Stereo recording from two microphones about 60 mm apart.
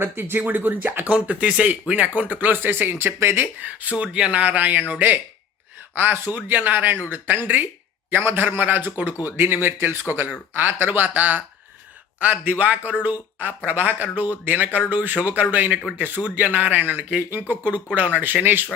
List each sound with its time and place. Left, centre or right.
0.0 s speech: right
17.0 s speech: centre
17.5 s speech: right